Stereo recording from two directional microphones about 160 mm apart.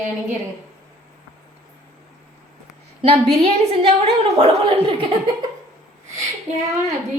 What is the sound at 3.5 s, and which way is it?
A child's voice, 35° right (ahead or behind).